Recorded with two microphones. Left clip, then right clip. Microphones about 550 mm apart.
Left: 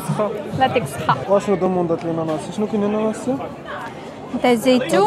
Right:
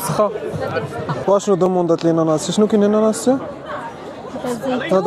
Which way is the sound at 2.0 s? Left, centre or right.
Right.